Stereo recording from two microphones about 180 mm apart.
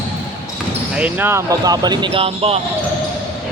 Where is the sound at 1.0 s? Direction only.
10° right (ahead or behind); by 2.6 s 35° right (ahead or behind).